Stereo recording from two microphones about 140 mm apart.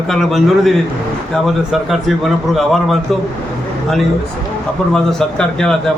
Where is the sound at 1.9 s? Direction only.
Centre (ahead or behind).